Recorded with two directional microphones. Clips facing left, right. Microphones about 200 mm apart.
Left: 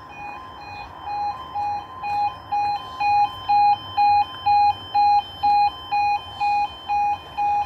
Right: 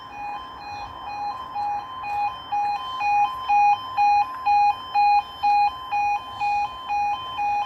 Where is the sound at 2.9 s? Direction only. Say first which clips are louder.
Left 2 dB; 35° left (ahead or behind).